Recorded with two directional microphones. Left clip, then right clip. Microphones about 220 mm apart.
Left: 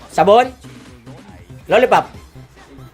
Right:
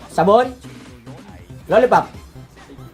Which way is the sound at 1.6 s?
40° left (ahead or behind).